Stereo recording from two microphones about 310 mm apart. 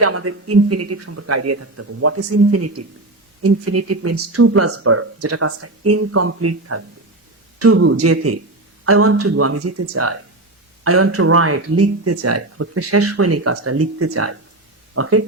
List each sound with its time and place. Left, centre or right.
0.0 s speech: right